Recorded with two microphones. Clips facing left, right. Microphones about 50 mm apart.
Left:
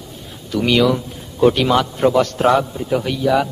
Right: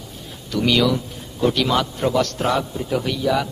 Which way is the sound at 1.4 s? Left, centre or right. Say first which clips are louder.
Left 5 dB; left.